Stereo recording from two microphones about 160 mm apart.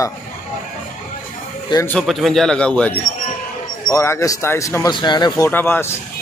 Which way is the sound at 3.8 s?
15° left (ahead or behind).